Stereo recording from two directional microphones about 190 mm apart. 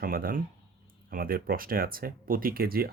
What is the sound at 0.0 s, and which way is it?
Speech, 50° right (ahead or behind).